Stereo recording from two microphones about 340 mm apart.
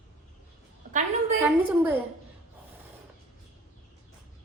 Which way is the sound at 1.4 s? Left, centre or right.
Centre.